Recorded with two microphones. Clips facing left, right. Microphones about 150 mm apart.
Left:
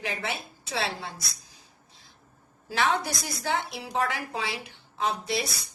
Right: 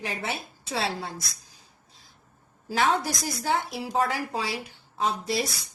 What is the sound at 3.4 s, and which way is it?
A woman's voice, 35° right (ahead or behind).